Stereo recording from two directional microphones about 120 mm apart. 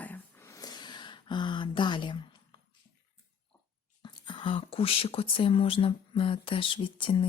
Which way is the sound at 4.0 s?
45° left (ahead or behind).